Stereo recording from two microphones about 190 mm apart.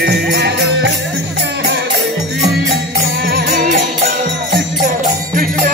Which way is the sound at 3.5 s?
45° right (ahead or behind).